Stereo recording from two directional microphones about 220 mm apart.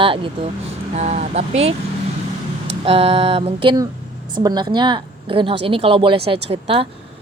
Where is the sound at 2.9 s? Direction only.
25° right (ahead or behind).